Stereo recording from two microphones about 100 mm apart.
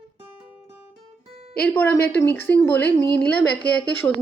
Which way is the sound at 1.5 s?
15° left (ahead or behind).